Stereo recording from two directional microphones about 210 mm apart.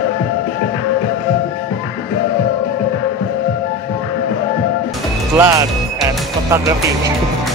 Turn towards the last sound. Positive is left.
turn(degrees=-15)  # may be behind; listen again after turning